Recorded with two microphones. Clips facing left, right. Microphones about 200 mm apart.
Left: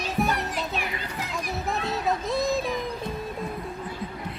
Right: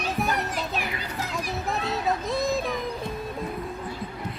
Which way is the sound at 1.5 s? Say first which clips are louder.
Left 1 dB; centre (ahead or behind).